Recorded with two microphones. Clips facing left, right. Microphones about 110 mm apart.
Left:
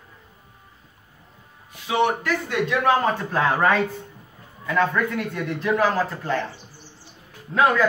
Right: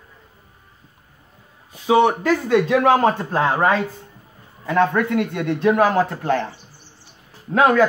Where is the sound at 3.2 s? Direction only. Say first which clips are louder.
Right 2 dB; 30° right (ahead or behind).